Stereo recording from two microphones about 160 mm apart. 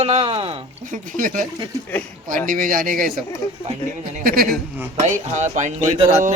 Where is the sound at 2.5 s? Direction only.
55° right (ahead or behind).